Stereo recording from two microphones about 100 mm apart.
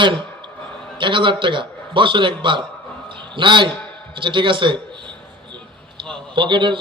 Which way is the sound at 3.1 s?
55° right (ahead or behind).